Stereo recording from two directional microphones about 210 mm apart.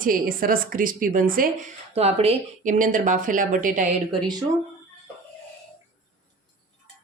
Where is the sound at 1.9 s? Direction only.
30° right (ahead or behind).